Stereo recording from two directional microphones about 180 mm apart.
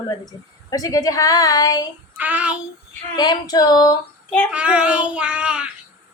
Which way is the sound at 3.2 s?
25° left (ahead or behind).